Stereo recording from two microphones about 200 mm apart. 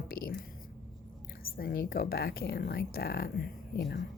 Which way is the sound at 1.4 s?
50° left (ahead or behind).